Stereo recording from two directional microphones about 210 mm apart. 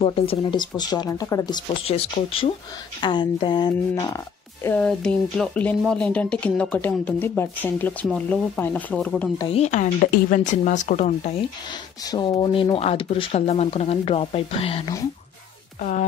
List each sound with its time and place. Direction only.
0.0 s speech: 25° left (ahead or behind)
4.6 s speech: 5° left (ahead or behind)
9.4 s speech: 30° left (ahead or behind)
12.1 s speech: 20° left (ahead or behind)